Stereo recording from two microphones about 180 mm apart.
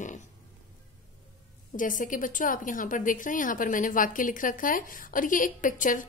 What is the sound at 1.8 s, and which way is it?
A woman's voice, 45° left (ahead or behind).